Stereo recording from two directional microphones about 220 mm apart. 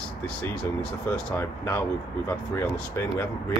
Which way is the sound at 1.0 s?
10° left (ahead or behind).